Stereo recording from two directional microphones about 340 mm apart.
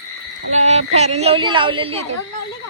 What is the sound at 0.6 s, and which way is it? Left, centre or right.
Speech, centre.